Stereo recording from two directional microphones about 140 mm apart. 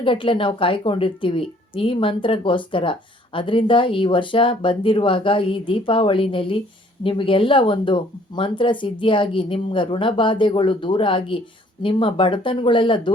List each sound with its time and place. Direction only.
0.0 s speech: 40° left (ahead or behind)